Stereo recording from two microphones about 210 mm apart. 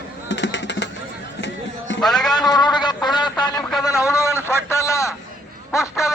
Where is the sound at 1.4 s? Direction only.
60° left (ahead or behind).